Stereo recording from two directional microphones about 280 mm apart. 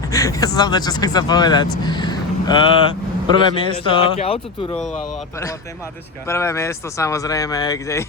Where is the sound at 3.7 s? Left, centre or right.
Centre.